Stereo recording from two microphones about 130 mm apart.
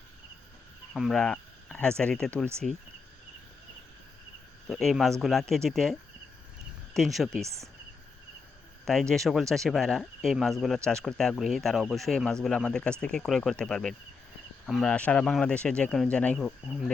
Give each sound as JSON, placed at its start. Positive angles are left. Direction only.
{"t": 0.9, "sound": "speech", "side_deg": 0}
{"t": 4.7, "sound": "speech", "side_deg": 0}
{"t": 7.4, "sound": "speech", "side_deg": -25}
{"t": 8.8, "sound": "speech", "side_deg": 5}